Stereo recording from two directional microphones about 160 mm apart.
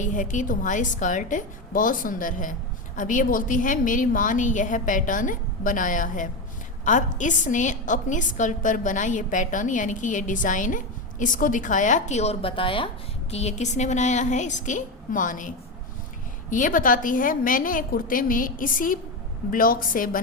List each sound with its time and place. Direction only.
0.0 s a woman's voice: 55° left (ahead or behind); by 12.9 s 35° left (ahead or behind)
13.3 s a woman's voice: 45° left (ahead or behind); by 20.2 s 60° left (ahead or behind)